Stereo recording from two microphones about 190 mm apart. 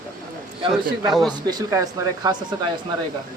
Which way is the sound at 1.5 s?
20° right (ahead or behind).